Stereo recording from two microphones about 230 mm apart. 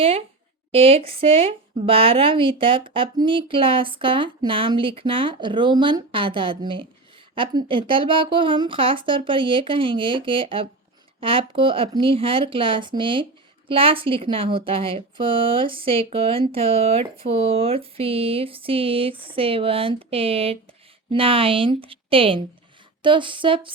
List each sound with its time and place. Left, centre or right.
0.7 s a woman's voice: right